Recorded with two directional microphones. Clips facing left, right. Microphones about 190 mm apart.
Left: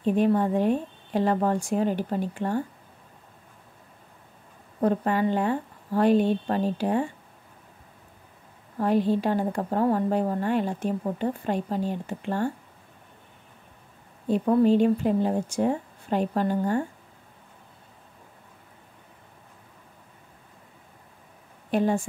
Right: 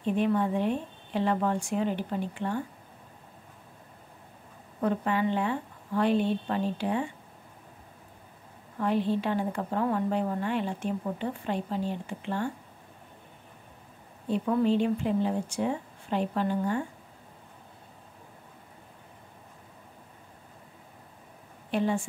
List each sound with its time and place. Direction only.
0.0 s a woman's voice: 40° left (ahead or behind)
4.8 s a woman's voice: 40° left (ahead or behind)
8.7 s a woman's voice: 40° left (ahead or behind)
14.3 s a woman's voice: 40° left (ahead or behind)
21.6 s a woman's voice: 45° left (ahead or behind)